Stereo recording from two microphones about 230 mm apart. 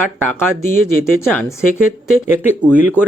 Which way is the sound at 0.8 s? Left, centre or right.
Left.